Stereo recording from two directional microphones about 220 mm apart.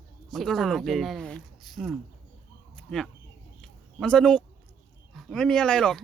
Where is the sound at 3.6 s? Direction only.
5° left (ahead or behind).